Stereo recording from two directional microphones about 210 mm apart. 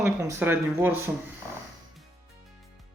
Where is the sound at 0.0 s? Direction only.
10° right (ahead or behind).